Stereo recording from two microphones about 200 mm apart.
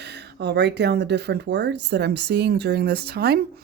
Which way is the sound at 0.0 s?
55° right (ahead or behind).